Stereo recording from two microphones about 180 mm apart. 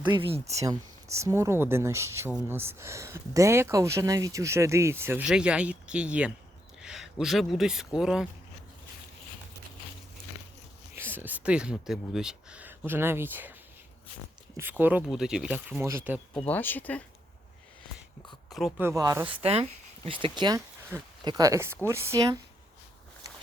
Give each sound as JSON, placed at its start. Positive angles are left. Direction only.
{"t": 0.1, "sound": "speech", "side_deg": -30}
{"t": 1.1, "sound": "speech", "side_deg": -15}
{"t": 10.9, "sound": "speech", "side_deg": -10}
{"t": 14.5, "sound": "speech", "side_deg": -10}
{"t": 16.3, "sound": "speech", "side_deg": 10}
{"t": 18.8, "sound": "speech", "side_deg": -15}
{"t": 19.3, "sound": "speech", "side_deg": -35}
{"t": 20.9, "sound": "speech", "side_deg": -10}